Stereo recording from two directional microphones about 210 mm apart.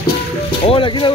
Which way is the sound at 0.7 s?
25° left (ahead or behind).